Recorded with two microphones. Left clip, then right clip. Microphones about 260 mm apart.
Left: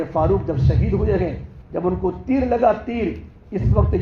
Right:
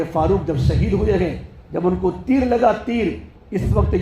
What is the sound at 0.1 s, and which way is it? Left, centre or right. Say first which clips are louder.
A man's voice: left 1 dB; right.